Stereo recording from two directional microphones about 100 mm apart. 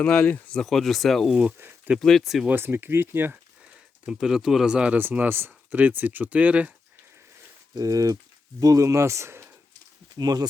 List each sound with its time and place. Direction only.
0.0 s speech: 15° left (ahead or behind)
0.6 s speech: centre (ahead or behind)
1.5 s a sound: 20° right (ahead or behind)
2.0 s speech: 5° left (ahead or behind)
2.5 s speech: 20° right (ahead or behind)
4.0 s speech: 5° right (ahead or behind)
7.8 s speech: 35° right (ahead or behind)
10.2 s speech: 40° right (ahead or behind)